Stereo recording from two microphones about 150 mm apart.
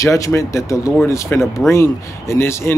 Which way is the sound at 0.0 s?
20° left (ahead or behind).